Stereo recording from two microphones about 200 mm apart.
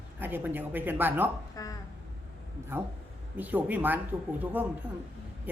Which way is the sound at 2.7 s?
10° right (ahead or behind).